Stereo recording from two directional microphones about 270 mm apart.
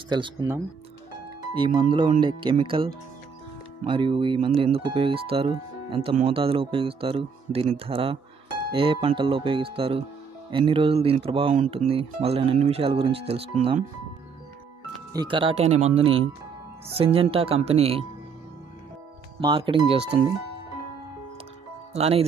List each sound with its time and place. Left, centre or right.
0.1 s speech: centre
15.1 s speech: centre
19.4 s speech: centre
21.9 s speech: right